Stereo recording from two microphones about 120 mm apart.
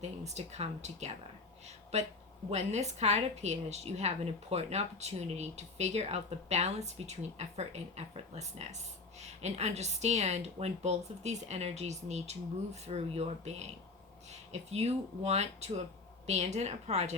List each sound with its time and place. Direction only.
0.0 s a woman's voice: 70° right (ahead or behind)
14.7 s a woman's voice: 65° right (ahead or behind)